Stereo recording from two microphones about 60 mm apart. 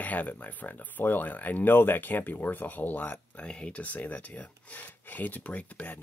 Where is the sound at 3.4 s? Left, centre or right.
Centre.